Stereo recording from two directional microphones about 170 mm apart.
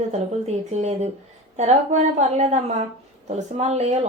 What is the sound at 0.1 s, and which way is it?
Speech, 40° right (ahead or behind).